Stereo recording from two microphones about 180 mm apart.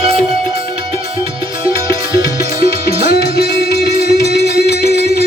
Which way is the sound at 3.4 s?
65° left (ahead or behind).